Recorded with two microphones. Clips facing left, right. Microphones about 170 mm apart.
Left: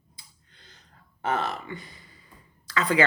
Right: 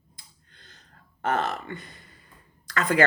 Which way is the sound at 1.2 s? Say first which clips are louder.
Right 1 dB; 50° right (ahead or behind).